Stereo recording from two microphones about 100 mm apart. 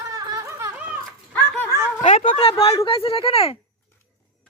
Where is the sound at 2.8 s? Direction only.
65° left (ahead or behind).